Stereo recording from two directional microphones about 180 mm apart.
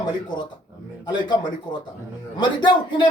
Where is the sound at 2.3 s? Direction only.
25° left (ahead or behind).